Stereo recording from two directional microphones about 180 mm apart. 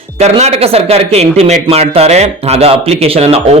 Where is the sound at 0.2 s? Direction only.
35° right (ahead or behind).